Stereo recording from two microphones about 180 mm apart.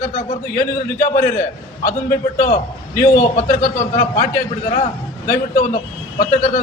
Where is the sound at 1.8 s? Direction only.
50° left (ahead or behind).